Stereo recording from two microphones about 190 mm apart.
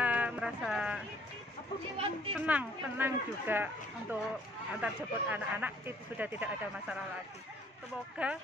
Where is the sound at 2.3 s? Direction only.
10° right (ahead or behind).